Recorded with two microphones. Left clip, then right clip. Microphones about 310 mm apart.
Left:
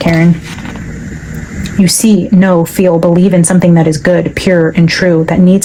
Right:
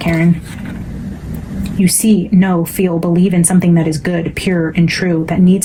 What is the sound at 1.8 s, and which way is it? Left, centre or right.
A woman's voice, left.